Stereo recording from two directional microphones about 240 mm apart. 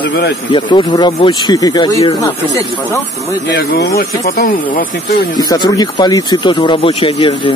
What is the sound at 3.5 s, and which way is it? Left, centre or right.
Speech, left.